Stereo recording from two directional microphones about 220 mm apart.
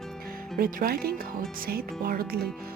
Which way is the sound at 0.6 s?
40° right (ahead or behind).